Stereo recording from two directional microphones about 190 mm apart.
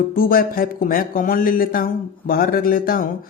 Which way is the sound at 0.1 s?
50° left (ahead or behind).